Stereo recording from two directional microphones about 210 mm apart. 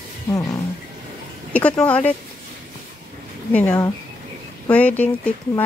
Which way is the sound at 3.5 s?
5° left (ahead or behind).